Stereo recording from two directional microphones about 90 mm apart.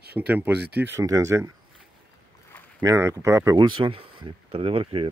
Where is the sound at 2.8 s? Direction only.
30° right (ahead or behind).